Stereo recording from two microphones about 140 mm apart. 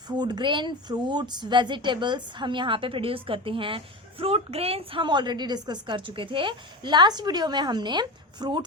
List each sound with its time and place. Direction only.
0.1 s a woman's voice: 30° right (ahead or behind)